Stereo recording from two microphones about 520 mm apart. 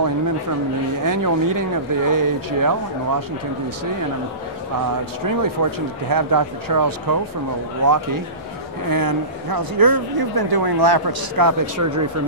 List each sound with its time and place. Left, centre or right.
1.0 s speech: right
5.2 s speech: right